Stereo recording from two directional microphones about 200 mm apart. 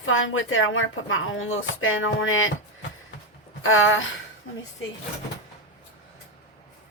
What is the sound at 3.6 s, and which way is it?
Speech, 80° left.